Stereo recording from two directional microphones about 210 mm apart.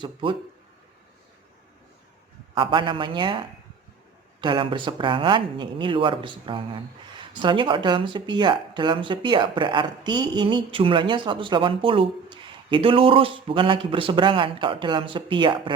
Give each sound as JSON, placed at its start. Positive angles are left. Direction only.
{"t": 0.0, "sound": "speech", "side_deg": -25}
{"t": 2.6, "sound": "speech", "side_deg": -25}